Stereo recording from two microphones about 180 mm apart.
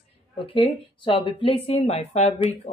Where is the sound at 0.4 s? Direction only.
30° left (ahead or behind).